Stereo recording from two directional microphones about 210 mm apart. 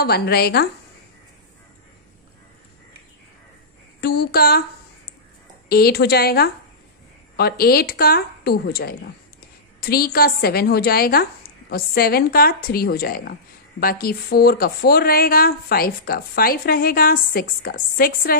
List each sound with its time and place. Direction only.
0.0 s a woman's voice: 50° left (ahead or behind)
4.0 s a woman's voice: 50° left (ahead or behind)
5.7 s a woman's voice: 45° left (ahead or behind)